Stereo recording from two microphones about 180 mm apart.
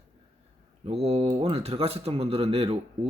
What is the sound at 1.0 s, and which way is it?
Speech, 35° right (ahead or behind).